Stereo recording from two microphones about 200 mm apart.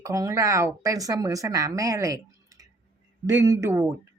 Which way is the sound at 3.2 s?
15° right (ahead or behind).